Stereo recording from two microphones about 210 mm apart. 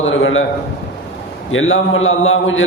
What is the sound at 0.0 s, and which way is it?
Speech, 65° left (ahead or behind).